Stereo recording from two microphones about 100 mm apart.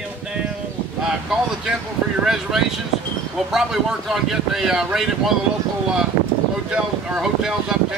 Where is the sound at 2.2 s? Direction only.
5° right (ahead or behind).